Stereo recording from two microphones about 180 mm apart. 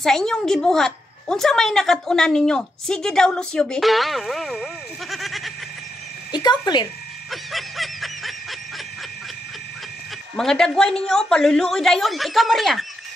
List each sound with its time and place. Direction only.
0.0 s a woman's voice: centre (ahead or behind)
5.1 s a sound: centre (ahead or behind)
6.3 s speech: 25° left (ahead or behind)
7.2 s snicker: centre (ahead or behind)
10.3 s a woman's voice: 5° left (ahead or behind)